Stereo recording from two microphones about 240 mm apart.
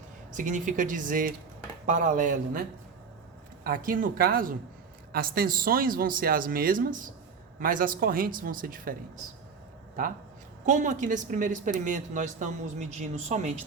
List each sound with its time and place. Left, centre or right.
0.3 s speech: right
10.7 s speech: right